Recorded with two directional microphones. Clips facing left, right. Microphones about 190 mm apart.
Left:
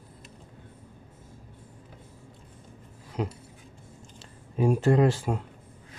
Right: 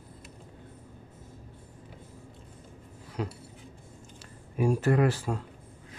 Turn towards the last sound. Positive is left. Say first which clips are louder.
# left 3 dB
turn(degrees=20)  # may be behind; listen again after turning